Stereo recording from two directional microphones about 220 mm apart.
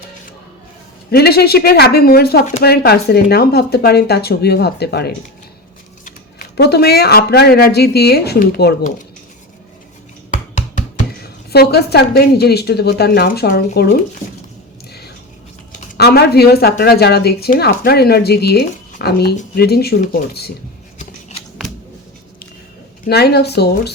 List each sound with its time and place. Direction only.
1.1 s speech: 45° left (ahead or behind)
10.3 s speech: 35° left (ahead or behind)
15.9 s speech: 45° left (ahead or behind)
21.0 s scissors: 30° left (ahead or behind)
23.0 s speech: 45° left (ahead or behind)